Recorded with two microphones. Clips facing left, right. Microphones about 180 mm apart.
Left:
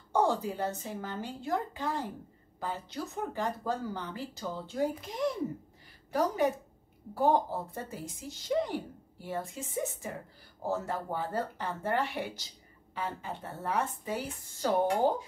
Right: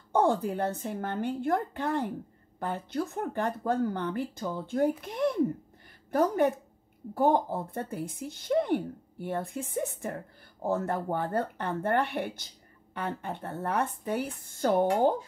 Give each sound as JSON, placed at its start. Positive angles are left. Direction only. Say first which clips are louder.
{"t": 0.1, "sound": "speech", "louder": "right 3 dB", "side_deg": -55}